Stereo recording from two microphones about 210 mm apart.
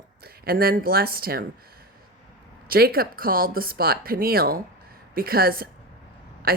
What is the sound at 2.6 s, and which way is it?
Speech, 45° right (ahead or behind).